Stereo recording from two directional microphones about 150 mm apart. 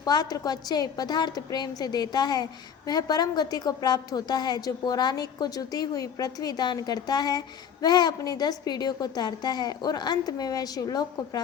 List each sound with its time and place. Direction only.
0.0 s a woman's voice: 25° left (ahead or behind)